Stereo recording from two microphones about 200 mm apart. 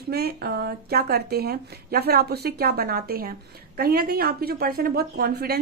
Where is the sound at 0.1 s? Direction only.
50° right (ahead or behind).